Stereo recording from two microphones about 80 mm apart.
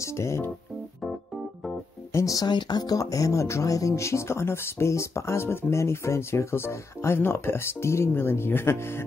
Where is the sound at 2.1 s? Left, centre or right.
Left.